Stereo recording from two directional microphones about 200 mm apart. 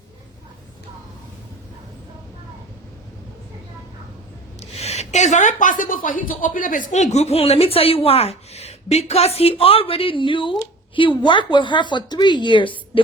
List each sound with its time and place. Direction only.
4.6 s a woman's voice: 30° left (ahead or behind)